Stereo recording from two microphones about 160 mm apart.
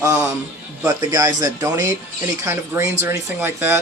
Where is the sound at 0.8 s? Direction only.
20° right (ahead or behind).